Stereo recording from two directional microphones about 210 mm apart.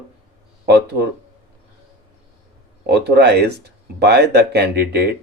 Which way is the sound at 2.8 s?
50° right (ahead or behind).